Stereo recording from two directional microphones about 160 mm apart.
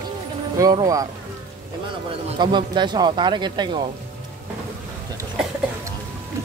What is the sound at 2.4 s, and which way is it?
Speech, 30° right (ahead or behind).